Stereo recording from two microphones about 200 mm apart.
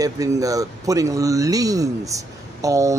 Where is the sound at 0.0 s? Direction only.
15° right (ahead or behind).